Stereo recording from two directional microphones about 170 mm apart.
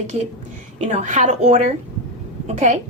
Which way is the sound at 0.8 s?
40° right (ahead or behind).